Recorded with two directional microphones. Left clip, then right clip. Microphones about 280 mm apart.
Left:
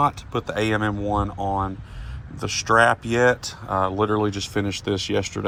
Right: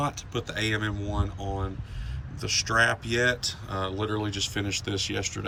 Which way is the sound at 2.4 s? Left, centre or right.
Centre.